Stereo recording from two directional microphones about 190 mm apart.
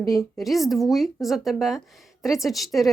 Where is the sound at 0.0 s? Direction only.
15° left (ahead or behind).